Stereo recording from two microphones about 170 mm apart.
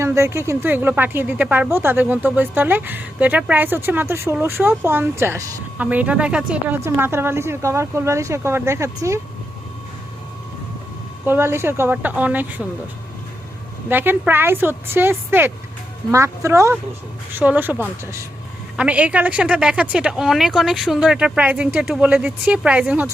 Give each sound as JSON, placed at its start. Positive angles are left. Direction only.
{"t": 0.0, "sound": "speech", "side_deg": -15}
{"t": 11.3, "sound": "speech", "side_deg": -15}
{"t": 13.9, "sound": "speech", "side_deg": -10}